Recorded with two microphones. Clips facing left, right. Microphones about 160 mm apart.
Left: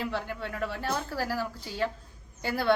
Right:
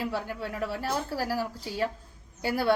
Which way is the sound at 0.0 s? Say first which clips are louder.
Right 1 dB; 10° right (ahead or behind).